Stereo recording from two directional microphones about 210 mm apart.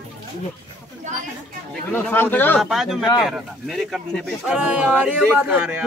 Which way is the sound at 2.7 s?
Centre (ahead or behind).